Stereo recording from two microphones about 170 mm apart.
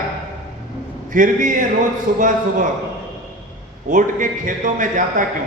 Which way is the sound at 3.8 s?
50° right (ahead or behind).